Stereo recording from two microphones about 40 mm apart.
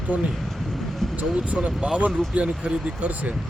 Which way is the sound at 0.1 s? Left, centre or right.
Right.